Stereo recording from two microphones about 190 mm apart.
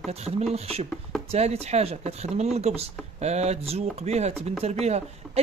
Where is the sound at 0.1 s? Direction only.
35° right (ahead or behind).